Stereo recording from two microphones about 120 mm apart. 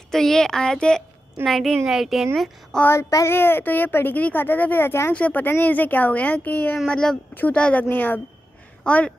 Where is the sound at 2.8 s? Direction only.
20° left (ahead or behind).